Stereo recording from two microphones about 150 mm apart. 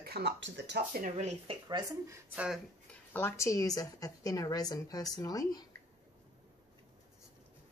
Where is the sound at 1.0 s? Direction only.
55° right (ahead or behind).